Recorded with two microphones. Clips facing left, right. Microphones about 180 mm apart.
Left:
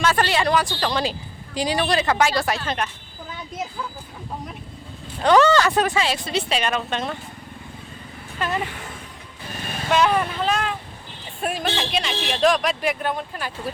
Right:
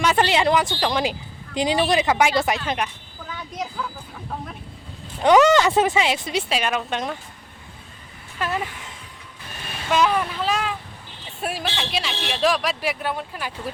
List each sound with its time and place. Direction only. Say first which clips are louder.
0.0 s speech: right 1 dB; 20° right (ahead or behind)
5.2 s speech: right 1 dB; 15° right (ahead or behind)
8.4 s a man's voice: left 1 dB; 5° right (ahead or behind)
9.9 s a man's voice: left 1 dB; centre (ahead or behind)